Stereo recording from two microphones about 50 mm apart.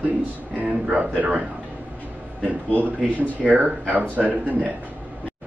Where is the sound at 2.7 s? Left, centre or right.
Left.